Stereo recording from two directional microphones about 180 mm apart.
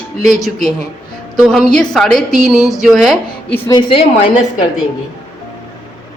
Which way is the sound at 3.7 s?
25° left (ahead or behind).